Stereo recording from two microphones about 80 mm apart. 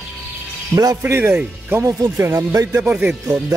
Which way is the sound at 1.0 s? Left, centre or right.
Right.